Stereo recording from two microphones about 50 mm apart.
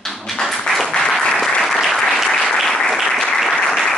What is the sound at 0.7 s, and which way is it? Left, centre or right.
Applause, centre.